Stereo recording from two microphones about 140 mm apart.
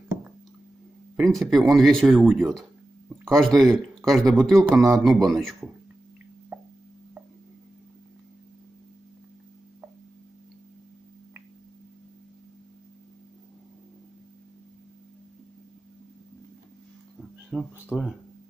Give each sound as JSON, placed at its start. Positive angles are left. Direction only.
{"t": 1.1, "sound": "speech", "side_deg": 0}
{"t": 6.5, "sound": "plop", "side_deg": -15}
{"t": 17.5, "sound": "speech", "side_deg": -5}